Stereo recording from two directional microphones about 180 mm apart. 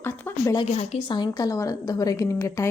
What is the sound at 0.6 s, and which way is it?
Speech, 35° left (ahead or behind).